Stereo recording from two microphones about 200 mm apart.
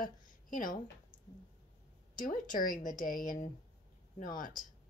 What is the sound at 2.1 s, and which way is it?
Speech, 45° left (ahead or behind).